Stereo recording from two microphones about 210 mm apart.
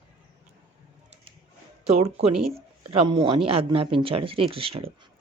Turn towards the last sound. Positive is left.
turn(degrees=-25)  # may be behind; listen again after turning